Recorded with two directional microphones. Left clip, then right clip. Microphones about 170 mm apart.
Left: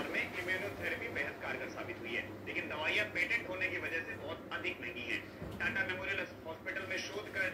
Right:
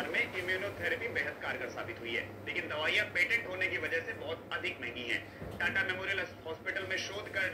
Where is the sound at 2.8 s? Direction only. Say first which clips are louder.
Right 4 dB; 20° right (ahead or behind).